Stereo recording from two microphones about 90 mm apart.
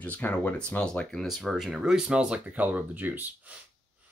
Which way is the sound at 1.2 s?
Centre (ahead or behind).